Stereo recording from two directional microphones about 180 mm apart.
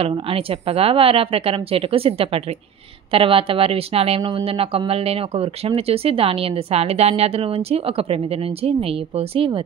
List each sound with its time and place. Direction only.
0.0 s speech: 30° right (ahead or behind)